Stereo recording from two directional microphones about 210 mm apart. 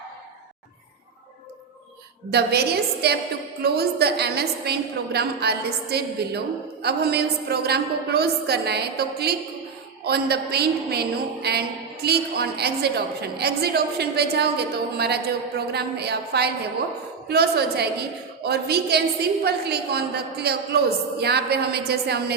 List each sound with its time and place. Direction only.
2.3 s a woman's voice: 50° right (ahead or behind)